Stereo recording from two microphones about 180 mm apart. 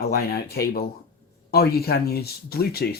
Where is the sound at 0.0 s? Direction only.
60° left (ahead or behind).